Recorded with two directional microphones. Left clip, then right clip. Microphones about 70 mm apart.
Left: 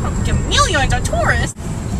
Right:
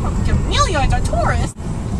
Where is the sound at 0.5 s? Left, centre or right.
Centre.